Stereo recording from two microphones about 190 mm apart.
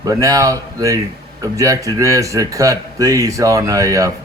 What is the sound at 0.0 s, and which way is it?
Speech, 20° right (ahead or behind).